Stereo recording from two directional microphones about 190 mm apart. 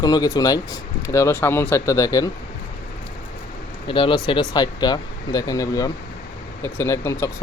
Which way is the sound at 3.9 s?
25° left (ahead or behind).